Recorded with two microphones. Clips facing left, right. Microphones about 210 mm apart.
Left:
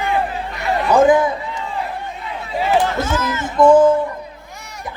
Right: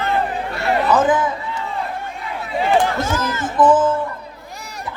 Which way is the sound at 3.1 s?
35° right (ahead or behind).